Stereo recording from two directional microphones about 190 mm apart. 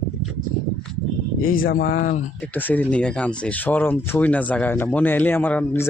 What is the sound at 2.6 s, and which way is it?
Speech, 10° left (ahead or behind).